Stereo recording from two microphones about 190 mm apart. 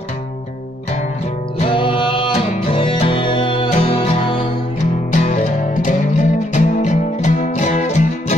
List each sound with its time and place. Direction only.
1.6 s music: 25° left (ahead or behind)
5.1 s music: 40° left (ahead or behind)